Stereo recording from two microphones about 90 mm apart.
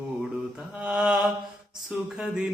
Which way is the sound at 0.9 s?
5° right (ahead or behind).